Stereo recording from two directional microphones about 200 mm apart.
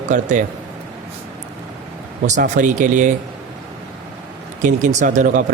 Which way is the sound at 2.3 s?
40° right (ahead or behind).